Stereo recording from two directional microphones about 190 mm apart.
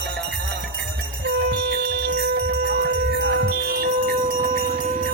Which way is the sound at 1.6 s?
60° right (ahead or behind).